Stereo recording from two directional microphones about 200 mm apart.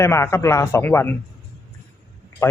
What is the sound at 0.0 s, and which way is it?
Speech, 15° left (ahead or behind).